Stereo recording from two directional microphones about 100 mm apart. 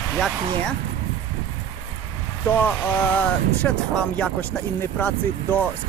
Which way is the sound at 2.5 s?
20° left (ahead or behind).